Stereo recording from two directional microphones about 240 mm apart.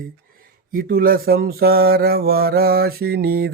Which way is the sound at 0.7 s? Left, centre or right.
Right.